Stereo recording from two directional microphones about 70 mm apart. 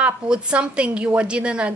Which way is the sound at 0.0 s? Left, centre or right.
Centre.